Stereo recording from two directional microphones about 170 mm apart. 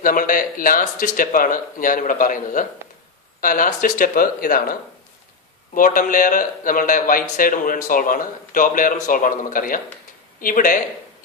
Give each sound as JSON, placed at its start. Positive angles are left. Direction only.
{"t": 0.0, "sound": "a man's voice", "side_deg": 55}
{"t": 5.8, "sound": "a man's voice", "side_deg": 50}